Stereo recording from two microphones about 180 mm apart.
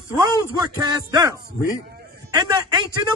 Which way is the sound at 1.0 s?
20° right (ahead or behind).